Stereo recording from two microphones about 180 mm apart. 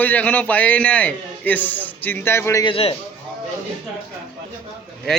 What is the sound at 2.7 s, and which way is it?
Speech, 30° left (ahead or behind).